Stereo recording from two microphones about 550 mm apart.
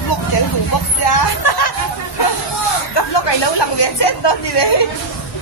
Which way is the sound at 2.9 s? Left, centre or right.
Left.